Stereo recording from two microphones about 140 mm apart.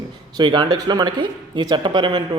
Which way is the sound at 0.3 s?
35° right (ahead or behind).